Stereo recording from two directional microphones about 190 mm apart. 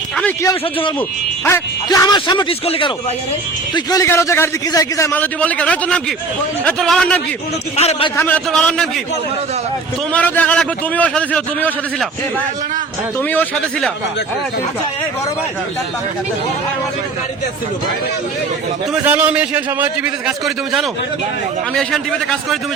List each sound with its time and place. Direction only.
1.5 s a man's voice: 15° left (ahead or behind)
7.8 s a man's voice: 30° left (ahead or behind)
8.1 s a man's voice: 10° left (ahead or behind)
10.1 s a man's voice: 10° left (ahead or behind)
13.3 s a man's voice: 10° left (ahead or behind)
19.0 s a man's voice: 10° right (ahead or behind)
21.8 s a man's voice: centre (ahead or behind)